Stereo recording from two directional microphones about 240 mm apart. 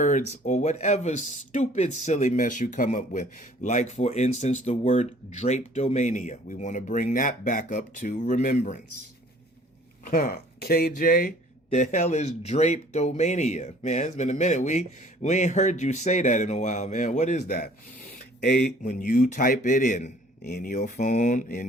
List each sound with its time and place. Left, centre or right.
0.4 s speech: left
10.0 s speech: left
18.3 s speech: left